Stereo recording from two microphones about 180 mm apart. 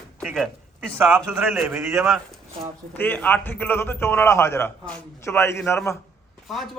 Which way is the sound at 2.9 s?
10° left (ahead or behind).